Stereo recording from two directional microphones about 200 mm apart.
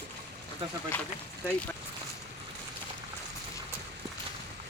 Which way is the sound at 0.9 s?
10° left (ahead or behind).